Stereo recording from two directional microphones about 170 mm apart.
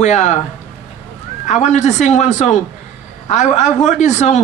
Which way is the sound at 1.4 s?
45° left (ahead or behind).